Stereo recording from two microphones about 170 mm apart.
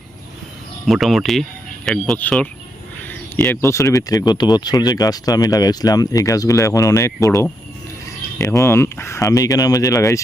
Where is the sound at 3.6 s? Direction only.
20° left (ahead or behind).